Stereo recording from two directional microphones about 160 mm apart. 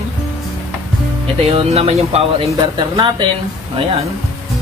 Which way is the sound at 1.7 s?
40° right (ahead or behind).